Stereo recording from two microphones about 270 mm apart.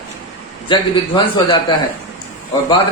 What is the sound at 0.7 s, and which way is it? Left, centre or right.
Speech, centre.